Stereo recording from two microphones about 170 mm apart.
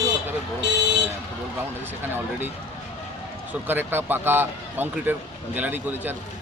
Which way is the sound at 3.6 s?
10° right (ahead or behind).